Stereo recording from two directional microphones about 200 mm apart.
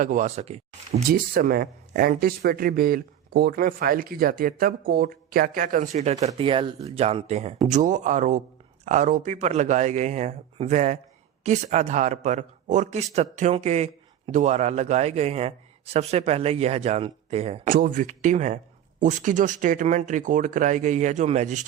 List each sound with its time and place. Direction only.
0.0 s a man's voice: 40° right (ahead or behind)
1.1 s a man's voice: 45° right (ahead or behind)